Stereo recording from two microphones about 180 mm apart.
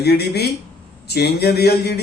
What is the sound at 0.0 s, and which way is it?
A man's voice, 65° left (ahead or behind).